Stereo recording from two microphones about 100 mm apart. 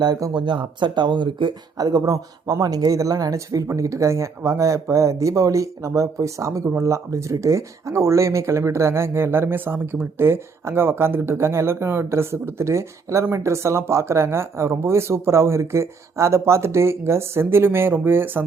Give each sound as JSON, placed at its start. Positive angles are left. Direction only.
{"t": 0.0, "sound": "speech", "side_deg": -40}